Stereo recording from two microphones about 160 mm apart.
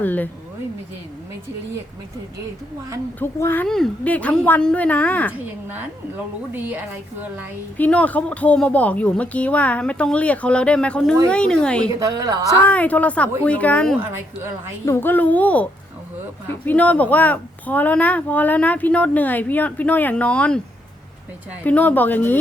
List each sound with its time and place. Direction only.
0.0 s speech: 10° left (ahead or behind)
3.2 s speech: 10° left (ahead or behind)
6.5 s a woman's voice: 10° right (ahead or behind)
7.8 s speech: 10° left (ahead or behind)
11.9 s a woman's voice: 20° right (ahead or behind)
12.6 s speech: 10° left (ahead or behind)
21.6 s speech: 10° left (ahead or behind)